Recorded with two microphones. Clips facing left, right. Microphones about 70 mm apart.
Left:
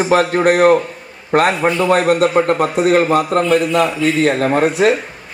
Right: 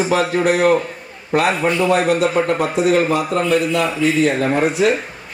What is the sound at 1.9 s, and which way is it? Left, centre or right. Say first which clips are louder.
A man's voice: left 4 dB; left.